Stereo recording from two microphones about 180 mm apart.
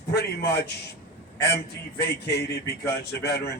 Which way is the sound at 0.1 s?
60° left (ahead or behind).